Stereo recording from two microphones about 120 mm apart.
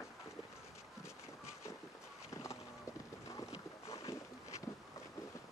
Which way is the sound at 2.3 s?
25° left (ahead or behind).